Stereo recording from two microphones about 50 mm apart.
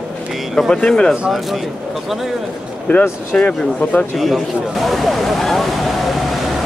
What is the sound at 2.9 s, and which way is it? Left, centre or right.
Speech, left.